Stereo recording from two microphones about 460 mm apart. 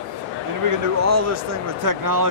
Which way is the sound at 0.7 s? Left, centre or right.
Right.